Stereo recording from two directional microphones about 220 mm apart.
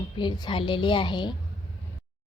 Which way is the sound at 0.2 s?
20° left (ahead or behind).